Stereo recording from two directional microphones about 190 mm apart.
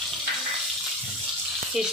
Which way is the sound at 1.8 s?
Centre (ahead or behind).